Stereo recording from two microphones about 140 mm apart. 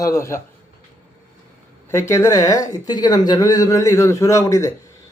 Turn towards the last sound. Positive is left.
turn(degrees=20)  # may be behind; listen again after turning